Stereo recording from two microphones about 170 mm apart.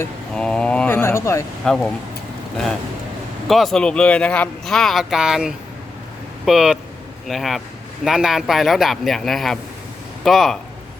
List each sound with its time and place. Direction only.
0.3 s speech: 5° left (ahead or behind)
1.6 s speech: 5° left (ahead or behind)
3.4 s speech: centre (ahead or behind)